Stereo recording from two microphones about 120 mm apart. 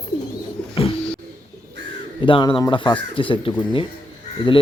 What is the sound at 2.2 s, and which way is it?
Speech, 45° left (ahead or behind).